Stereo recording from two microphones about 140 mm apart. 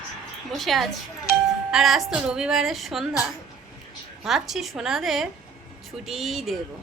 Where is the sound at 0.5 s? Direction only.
Centre (ahead or behind).